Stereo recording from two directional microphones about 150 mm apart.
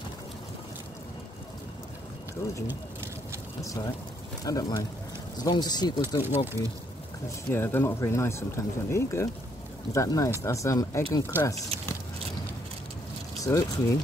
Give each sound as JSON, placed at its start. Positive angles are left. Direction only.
{"t": 2.4, "sound": "speech", "side_deg": 20}
{"t": 3.6, "sound": "speech", "side_deg": 25}
{"t": 6.2, "sound": "speech", "side_deg": -15}
{"t": 7.5, "sound": "speech", "side_deg": 15}
{"t": 13.4, "sound": "speech", "side_deg": 20}